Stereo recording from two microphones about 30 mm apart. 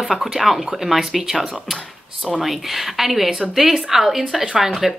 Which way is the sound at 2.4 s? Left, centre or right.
Centre.